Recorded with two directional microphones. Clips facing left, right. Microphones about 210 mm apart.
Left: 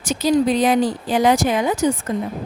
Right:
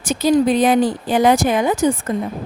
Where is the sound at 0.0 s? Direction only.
55° right (ahead or behind).